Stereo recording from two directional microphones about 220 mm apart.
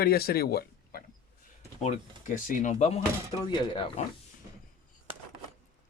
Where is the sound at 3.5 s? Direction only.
20° left (ahead or behind).